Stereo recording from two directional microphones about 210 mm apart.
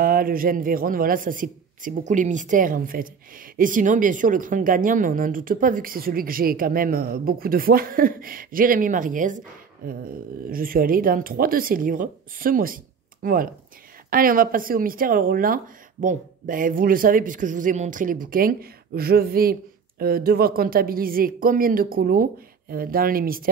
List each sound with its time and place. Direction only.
0.0 s a woman's voice: 45° right (ahead or behind)